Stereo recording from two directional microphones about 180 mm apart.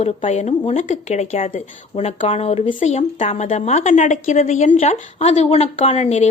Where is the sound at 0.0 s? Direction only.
35° left (ahead or behind).